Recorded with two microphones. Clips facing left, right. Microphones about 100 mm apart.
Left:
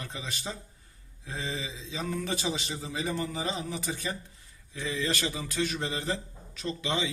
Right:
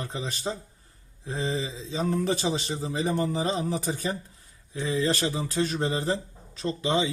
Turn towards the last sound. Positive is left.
turn(degrees=-35)  # may be behind; listen again after turning